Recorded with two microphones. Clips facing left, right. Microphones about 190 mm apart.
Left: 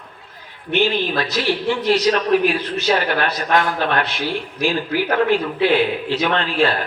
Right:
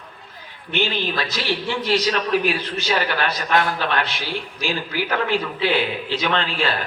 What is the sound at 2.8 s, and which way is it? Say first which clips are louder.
A man's voice: left 3 dB; 50° left (ahead or behind).